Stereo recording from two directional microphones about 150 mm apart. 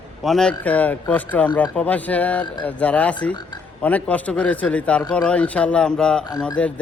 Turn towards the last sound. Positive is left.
turn(degrees=10)  # may be behind; listen again after turning